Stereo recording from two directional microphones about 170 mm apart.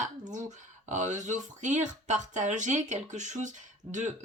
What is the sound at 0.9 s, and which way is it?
Speech, 45° right (ahead or behind).